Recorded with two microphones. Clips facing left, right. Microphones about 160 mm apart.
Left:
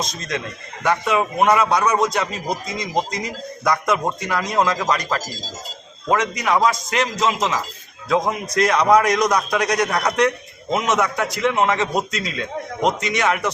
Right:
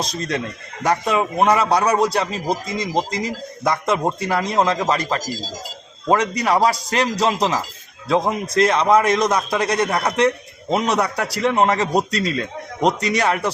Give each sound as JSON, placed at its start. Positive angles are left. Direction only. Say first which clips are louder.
{"t": 0.0, "sound": "a man's voice", "louder": "right 3 dB", "side_deg": -30}